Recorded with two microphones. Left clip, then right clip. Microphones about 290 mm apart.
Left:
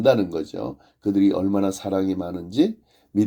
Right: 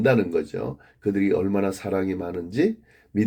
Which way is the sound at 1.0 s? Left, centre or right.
Left.